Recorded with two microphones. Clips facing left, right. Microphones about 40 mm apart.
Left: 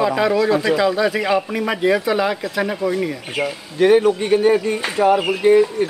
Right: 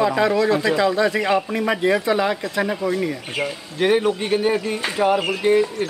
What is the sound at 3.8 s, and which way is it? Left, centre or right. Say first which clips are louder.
Speech: left 5 dB; centre.